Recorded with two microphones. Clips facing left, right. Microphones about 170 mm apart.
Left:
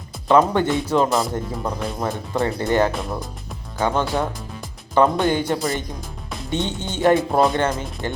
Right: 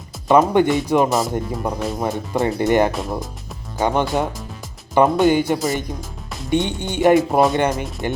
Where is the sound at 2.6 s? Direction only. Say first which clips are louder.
Right 3 dB; 15° right (ahead or behind).